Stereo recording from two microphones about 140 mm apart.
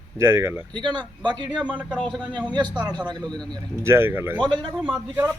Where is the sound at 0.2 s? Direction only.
20° right (ahead or behind).